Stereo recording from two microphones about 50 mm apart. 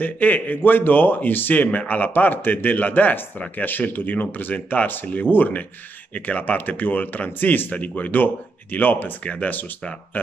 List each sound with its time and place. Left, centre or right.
0.0 s a man's voice: left